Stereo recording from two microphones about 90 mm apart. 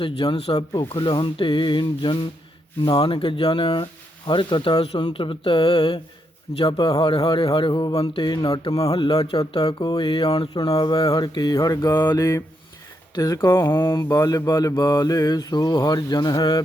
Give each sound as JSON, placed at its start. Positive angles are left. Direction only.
{"t": 0.0, "sound": "speech", "side_deg": 75}
{"t": 0.7, "sound": "speech", "side_deg": 65}
{"t": 5.1, "sound": "speech", "side_deg": 85}
{"t": 7.5, "sound": "mantra", "side_deg": 60}
{"t": 8.1, "sound": "speech", "side_deg": 55}
{"t": 8.7, "sound": "mantra", "side_deg": 45}
{"t": 9.0, "sound": "speech", "side_deg": 60}
{"t": 10.5, "sound": "mantra", "side_deg": 50}
{"t": 13.6, "sound": "speech", "side_deg": 65}
{"t": 14.1, "sound": "mantra", "side_deg": 40}